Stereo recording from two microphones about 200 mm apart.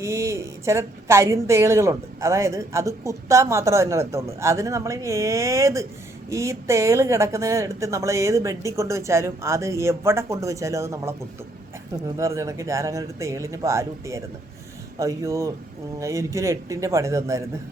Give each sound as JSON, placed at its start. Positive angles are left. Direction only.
{"t": 0.0, "sound": "a woman's voice", "side_deg": -15}
{"t": 12.1, "sound": "a woman's voice", "side_deg": -15}